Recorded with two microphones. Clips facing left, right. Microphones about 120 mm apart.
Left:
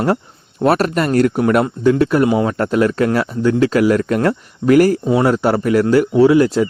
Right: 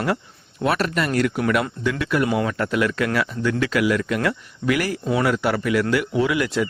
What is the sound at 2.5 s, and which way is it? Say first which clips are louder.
Speech: left 6 dB; 40° left (ahead or behind).